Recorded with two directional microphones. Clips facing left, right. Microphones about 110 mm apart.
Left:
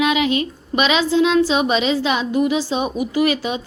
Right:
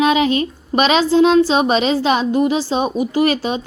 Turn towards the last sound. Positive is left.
turn(degrees=-35)  # may be behind; listen again after turning